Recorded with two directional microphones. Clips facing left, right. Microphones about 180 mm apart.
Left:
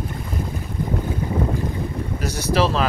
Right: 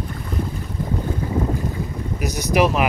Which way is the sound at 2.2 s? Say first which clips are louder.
Right 2 dB; 15° right (ahead or behind).